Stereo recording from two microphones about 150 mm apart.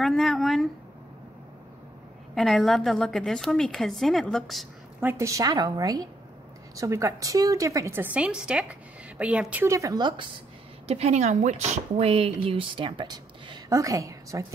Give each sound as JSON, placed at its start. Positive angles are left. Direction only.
{"t": 0.0, "sound": "a woman's voice", "side_deg": 0}
{"t": 2.3, "sound": "a woman's voice", "side_deg": 0}
{"t": 5.0, "sound": "a woman's voice", "side_deg": -20}
{"t": 10.9, "sound": "speech", "side_deg": -45}